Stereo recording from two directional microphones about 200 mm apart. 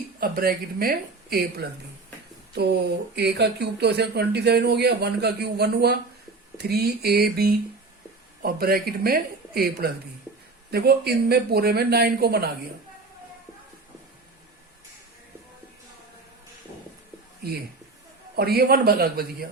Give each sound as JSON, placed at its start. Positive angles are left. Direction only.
{"t": 0.2, "sound": "speech", "side_deg": -50}
{"t": 2.6, "sound": "speech", "side_deg": -55}
{"t": 18.3, "sound": "speech", "side_deg": -50}